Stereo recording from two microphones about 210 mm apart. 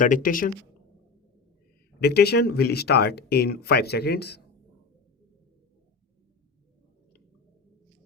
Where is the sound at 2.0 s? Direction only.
50° left (ahead or behind).